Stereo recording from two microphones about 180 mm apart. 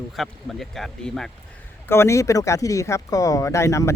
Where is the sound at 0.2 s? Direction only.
Centre (ahead or behind).